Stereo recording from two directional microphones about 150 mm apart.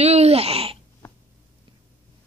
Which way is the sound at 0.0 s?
45° right (ahead or behind).